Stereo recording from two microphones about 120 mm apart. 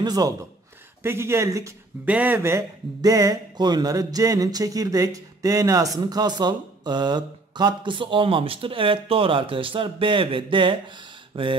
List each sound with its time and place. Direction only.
0.0 s a man's voice: 35° right (ahead or behind)
1.0 s speech: 20° right (ahead or behind)
2.0 s speech: 15° right (ahead or behind)
3.0 s a sound: 30° right (ahead or behind)
11.3 s speech: 45° right (ahead or behind)